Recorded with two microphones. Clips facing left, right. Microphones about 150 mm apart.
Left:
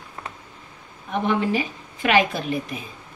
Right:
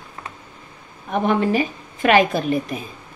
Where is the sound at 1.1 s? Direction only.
45° right (ahead or behind).